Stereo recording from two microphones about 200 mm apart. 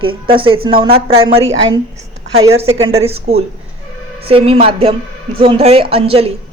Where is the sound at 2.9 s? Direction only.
30° right (ahead or behind).